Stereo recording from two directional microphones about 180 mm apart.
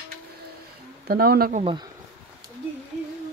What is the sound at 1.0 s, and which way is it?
Speech, 55° right (ahead or behind).